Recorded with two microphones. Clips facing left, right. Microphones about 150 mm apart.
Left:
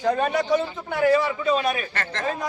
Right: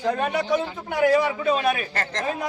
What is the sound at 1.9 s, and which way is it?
Speech, 35° right (ahead or behind).